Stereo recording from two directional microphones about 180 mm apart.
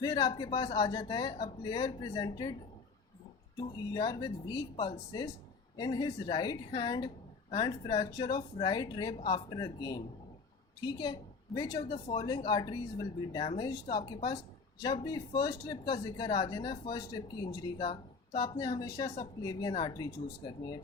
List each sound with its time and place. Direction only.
0.0 s speech: 20° left (ahead or behind)
3.9 s a woman's voice: 20° left (ahead or behind)